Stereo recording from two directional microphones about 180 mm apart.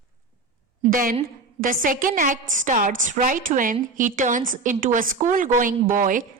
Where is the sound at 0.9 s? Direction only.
50° right (ahead or behind).